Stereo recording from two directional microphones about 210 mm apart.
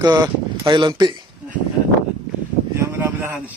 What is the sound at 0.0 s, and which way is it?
Speech, 20° right (ahead or behind).